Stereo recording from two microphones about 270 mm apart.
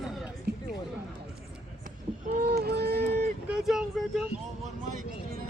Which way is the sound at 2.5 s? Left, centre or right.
Right.